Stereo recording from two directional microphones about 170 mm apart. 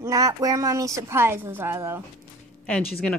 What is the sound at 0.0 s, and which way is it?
A woman's voice, 20° right (ahead or behind).